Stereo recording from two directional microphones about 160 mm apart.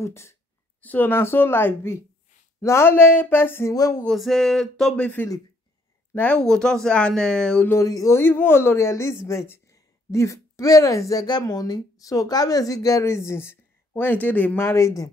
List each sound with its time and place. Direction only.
0.0 s speech: 15° left (ahead or behind)
4.0 s speech: centre (ahead or behind)
7.7 s a man's voice: 20° left (ahead or behind)